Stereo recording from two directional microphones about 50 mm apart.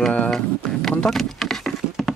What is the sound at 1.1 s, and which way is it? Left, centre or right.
Patter, centre.